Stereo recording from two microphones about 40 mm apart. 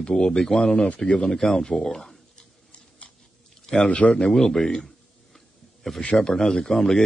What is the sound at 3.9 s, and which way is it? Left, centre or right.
Speech, left.